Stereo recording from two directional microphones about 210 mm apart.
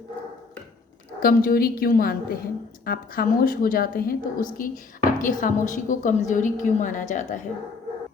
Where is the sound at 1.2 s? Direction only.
45° left (ahead or behind).